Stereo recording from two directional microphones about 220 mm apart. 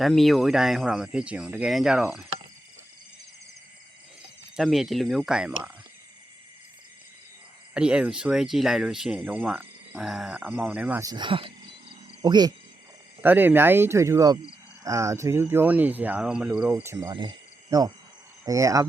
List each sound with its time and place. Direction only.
0.0 s speech: centre (ahead or behind)
4.5 s speech: centre (ahead or behind)
7.7 s speech: 5° right (ahead or behind)